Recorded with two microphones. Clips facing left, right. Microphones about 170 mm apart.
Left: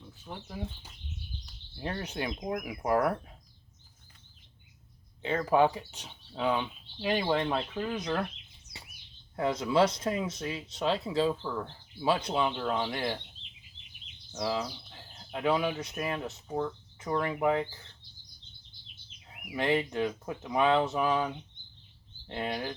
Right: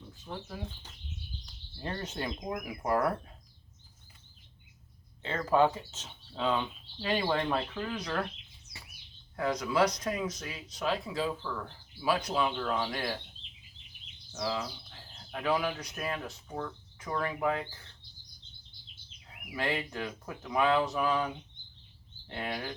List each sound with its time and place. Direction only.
0.3 s speech: 15° left (ahead or behind)
5.2 s speech: 15° left (ahead or behind)
9.3 s speech: 25° left (ahead or behind)
14.3 s speech: 20° left (ahead or behind)
19.5 s speech: 25° left (ahead or behind)
22.3 s speech: 20° left (ahead or behind)